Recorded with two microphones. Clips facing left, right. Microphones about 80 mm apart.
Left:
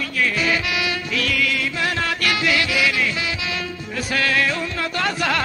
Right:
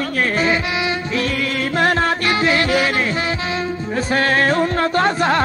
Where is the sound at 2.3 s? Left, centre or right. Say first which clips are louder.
Right 2 dB; right.